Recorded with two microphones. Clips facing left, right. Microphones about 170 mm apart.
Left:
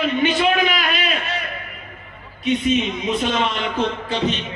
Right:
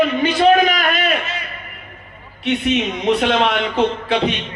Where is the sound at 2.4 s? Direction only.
70° right (ahead or behind).